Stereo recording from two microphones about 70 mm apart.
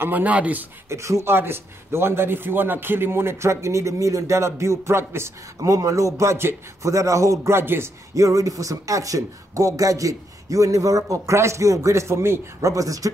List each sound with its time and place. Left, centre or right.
0.0 s speech: right
0.8 s speech: right
1.3 s a man's voice: right
5.6 s speech: right
8.1 s speech: right
12.7 s speech: right